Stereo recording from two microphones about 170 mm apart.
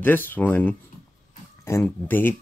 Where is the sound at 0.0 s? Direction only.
10° left (ahead or behind).